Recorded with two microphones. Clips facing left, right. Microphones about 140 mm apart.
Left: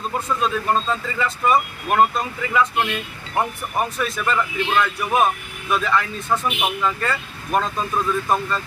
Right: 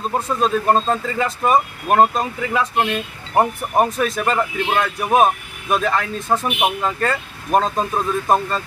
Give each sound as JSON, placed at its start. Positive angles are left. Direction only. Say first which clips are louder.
{"t": 0.1, "sound": "speech", "louder": "right 4 dB", "side_deg": -45}